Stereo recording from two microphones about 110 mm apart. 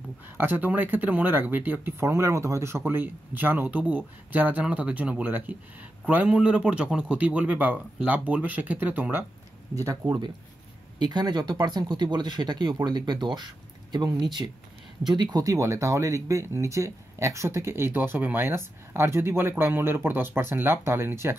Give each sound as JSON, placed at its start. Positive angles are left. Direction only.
{"t": 0.4, "sound": "speech", "side_deg": -15}
{"t": 9.8, "sound": "speech", "side_deg": -30}
{"t": 15.3, "sound": "speech", "side_deg": -30}